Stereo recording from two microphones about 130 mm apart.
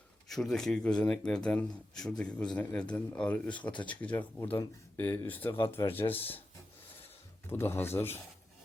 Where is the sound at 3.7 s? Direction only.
35° left (ahead or behind).